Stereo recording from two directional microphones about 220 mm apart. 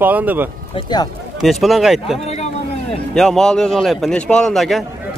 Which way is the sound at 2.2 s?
30° left (ahead or behind).